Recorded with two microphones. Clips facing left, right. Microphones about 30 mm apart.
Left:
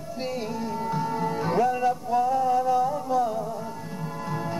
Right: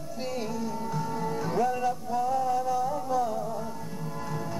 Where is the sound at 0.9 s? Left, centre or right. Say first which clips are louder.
Left 5 dB; left.